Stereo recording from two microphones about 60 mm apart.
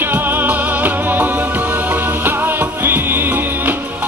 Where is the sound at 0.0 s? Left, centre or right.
Right.